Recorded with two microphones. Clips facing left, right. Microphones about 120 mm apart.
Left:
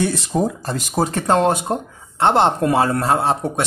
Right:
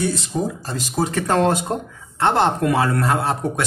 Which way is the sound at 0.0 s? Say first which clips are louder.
Left 3 dB; 60° left (ahead or behind).